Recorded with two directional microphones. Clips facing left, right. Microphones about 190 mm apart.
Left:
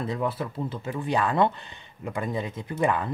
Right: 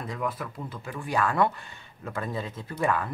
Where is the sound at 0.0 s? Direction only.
25° left (ahead or behind).